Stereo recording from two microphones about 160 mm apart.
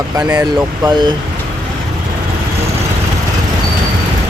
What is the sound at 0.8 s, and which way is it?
Speech, 25° right (ahead or behind).